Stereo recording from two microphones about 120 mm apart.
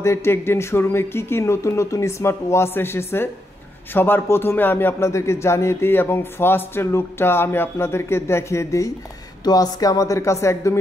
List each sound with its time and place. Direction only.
0.0 s speech: 20° left (ahead or behind)